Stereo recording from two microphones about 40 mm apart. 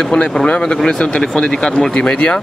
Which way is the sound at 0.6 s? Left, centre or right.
Centre.